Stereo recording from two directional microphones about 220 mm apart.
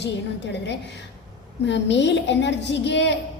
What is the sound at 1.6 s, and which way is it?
A woman's voice, 55° left (ahead or behind).